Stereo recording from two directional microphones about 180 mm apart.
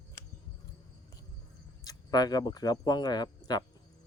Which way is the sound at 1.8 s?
20° left (ahead or behind).